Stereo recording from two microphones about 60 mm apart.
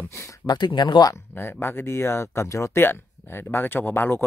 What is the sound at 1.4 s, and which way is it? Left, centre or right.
Speech, left.